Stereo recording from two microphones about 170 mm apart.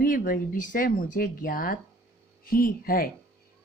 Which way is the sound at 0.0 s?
55° left (ahead or behind).